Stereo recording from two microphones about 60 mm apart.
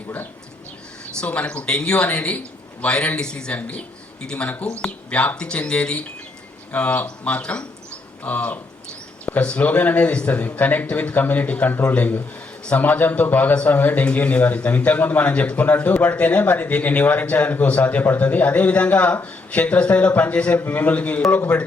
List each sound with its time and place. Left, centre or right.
1.2 s speech: left
4.4 s speech: left